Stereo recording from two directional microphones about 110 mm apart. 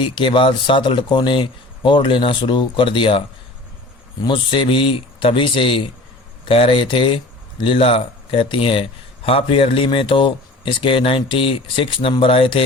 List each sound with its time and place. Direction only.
0.0 s speech: 50° left (ahead or behind)
4.3 s speech: 50° left (ahead or behind)